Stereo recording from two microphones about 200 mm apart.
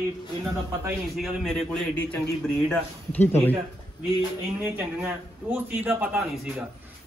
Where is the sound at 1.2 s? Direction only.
Centre (ahead or behind).